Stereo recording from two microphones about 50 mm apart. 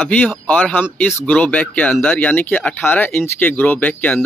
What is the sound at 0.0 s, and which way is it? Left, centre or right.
Speech, left.